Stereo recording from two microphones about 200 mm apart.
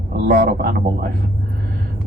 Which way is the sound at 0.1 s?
55° right (ahead or behind).